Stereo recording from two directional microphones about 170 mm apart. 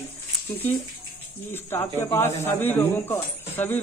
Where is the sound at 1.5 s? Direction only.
15° left (ahead or behind).